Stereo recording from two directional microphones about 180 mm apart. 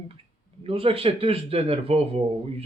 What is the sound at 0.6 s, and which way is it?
Speech, 30° right (ahead or behind).